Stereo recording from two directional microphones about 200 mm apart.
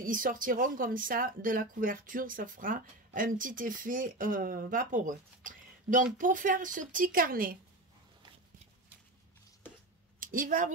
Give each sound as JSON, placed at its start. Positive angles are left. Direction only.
{"t": 0.0, "sound": "speech", "side_deg": -45}
{"t": 10.2, "sound": "a woman's voice", "side_deg": -45}